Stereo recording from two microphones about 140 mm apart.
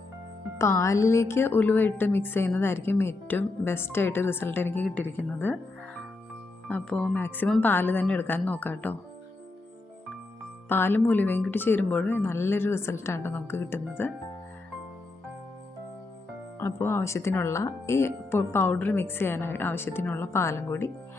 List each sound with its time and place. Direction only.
0.6 s speech: 20° left (ahead or behind)
6.7 s speech: 10° left (ahead or behind)
10.7 s speech: 15° left (ahead or behind)
16.6 s speech: 20° left (ahead or behind)